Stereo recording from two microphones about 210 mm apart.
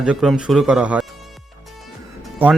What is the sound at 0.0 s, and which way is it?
Speech, 5° right (ahead or behind).